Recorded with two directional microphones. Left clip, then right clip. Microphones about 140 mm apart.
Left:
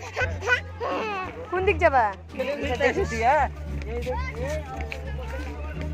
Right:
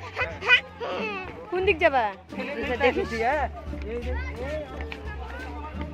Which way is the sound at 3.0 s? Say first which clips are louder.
Left 3 dB; 30° right (ahead or behind).